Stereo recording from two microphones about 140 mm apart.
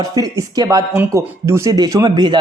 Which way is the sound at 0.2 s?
25° right (ahead or behind).